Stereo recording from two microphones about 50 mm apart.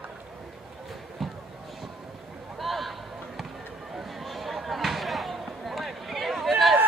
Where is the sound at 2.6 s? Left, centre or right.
Centre.